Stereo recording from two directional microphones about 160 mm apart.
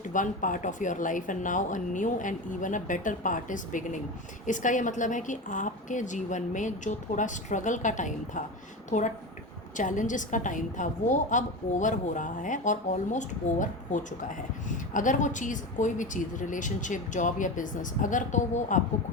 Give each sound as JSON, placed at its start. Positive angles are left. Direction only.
{"t": 0.1, "sound": "a woman's voice", "side_deg": 55}